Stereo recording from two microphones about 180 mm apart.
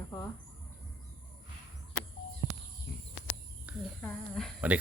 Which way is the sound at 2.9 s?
65° left (ahead or behind).